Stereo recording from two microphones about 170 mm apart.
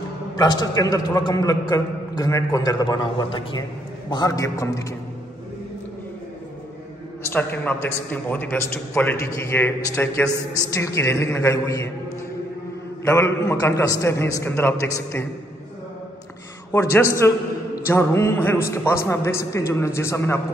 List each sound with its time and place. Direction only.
0.4 s a man's voice: 25° left (ahead or behind)
7.2 s a man's voice: 10° left (ahead or behind)
13.0 s a man's voice: 15° left (ahead or behind)
16.7 s a man's voice: 15° left (ahead or behind)